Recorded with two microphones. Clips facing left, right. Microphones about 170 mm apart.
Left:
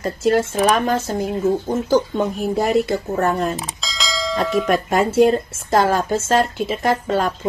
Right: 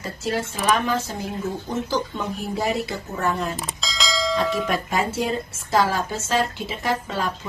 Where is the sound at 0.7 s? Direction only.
45° left (ahead or behind).